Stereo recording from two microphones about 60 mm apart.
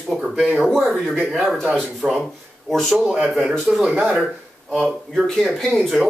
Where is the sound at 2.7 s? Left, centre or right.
Centre.